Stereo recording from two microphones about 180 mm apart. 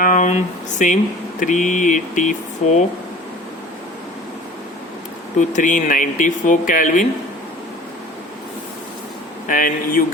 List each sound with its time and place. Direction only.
0.0 s a sound: 45° left (ahead or behind)
1.4 s speech: 45° left (ahead or behind)
5.4 s speech: 45° left (ahead or behind)
9.5 s speech: 50° left (ahead or behind)